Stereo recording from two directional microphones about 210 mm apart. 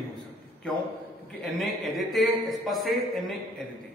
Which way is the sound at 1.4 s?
Centre (ahead or behind).